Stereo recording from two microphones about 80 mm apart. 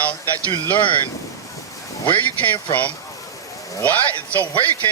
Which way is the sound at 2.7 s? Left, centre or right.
Centre.